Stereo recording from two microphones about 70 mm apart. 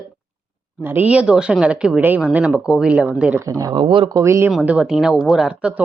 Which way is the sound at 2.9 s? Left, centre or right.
Right.